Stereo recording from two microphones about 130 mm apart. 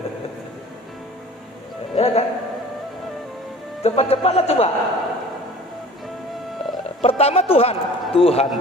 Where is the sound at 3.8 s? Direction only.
50° left (ahead or behind).